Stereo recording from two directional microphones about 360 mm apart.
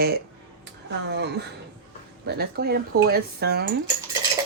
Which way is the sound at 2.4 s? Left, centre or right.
Right.